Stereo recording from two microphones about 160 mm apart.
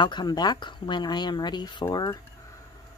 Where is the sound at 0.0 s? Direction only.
25° left (ahead or behind).